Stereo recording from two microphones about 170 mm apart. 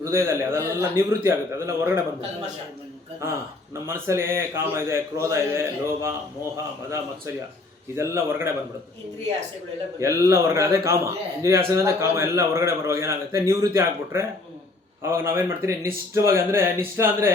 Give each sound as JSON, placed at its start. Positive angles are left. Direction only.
{"t": 0.0, "sound": "a man's voice", "side_deg": -15}
{"t": 3.2, "sound": "a man's voice", "side_deg": -15}
{"t": 7.9, "sound": "a man's voice", "side_deg": -15}
{"t": 10.0, "sound": "a man's voice", "side_deg": -15}